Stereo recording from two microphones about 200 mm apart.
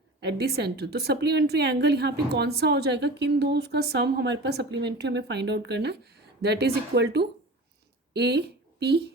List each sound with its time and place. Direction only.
0.2 s a woman's voice: 55° right (ahead or behind)